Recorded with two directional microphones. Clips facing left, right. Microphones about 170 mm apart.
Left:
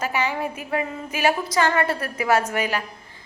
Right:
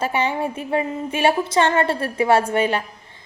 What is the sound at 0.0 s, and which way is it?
A woman's voice, 30° right (ahead or behind).